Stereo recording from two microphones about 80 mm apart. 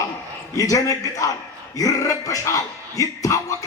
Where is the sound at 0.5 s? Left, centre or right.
Left.